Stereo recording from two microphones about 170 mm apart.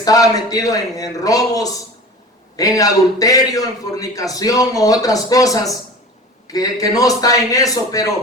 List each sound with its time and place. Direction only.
0.0 s a man's voice: 20° left (ahead or behind)